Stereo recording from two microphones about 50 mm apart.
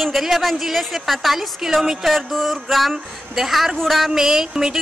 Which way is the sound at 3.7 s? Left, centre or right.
Centre.